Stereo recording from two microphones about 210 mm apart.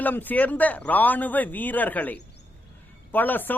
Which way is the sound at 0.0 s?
10° left (ahead or behind).